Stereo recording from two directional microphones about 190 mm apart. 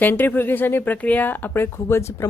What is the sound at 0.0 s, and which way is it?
Speech, 10° left (ahead or behind).